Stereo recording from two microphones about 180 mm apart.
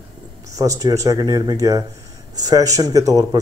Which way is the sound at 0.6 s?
20° right (ahead or behind).